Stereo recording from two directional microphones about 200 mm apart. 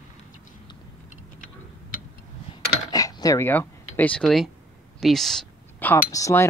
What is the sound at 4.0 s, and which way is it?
Speech, 5° left (ahead or behind).